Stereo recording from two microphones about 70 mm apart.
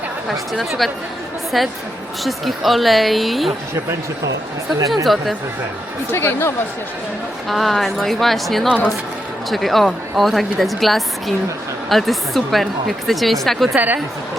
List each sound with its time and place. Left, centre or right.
0.3 s a woman's voice: centre
5.0 s a woman's voice: centre
6.1 s speech: left
7.4 s a woman's voice: centre
13.7 s a woman's voice: right